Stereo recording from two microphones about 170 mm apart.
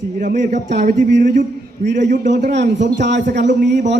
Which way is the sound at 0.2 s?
50° right (ahead or behind).